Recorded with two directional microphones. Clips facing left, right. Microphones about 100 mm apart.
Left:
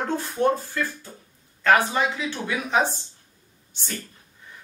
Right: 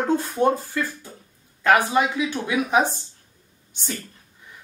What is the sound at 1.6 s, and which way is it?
Speech, 15° right (ahead or behind).